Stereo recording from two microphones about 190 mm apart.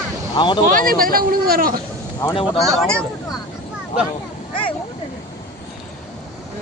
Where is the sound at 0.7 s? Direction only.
50° right (ahead or behind).